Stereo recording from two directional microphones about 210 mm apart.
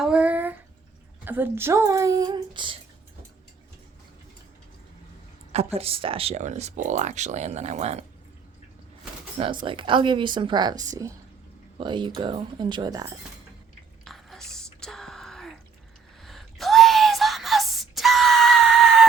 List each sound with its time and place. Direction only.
0.0 s a sound: 5° right (ahead or behind)
1.2 s speech: 10° right (ahead or behind)
5.5 s speech: 30° right (ahead or behind)
9.6 s speech: 25° right (ahead or behind)
14.0 s drip: centre (ahead or behind)
16.2 s a sound: centre (ahead or behind)